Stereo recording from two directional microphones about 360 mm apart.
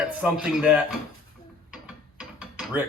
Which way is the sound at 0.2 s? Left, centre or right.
Centre.